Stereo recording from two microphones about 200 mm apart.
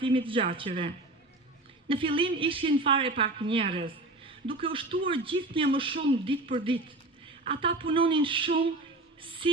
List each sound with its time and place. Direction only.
0.0 s speech: 25° right (ahead or behind)
1.9 s speech: 25° right (ahead or behind)
9.4 s a sound: 25° right (ahead or behind)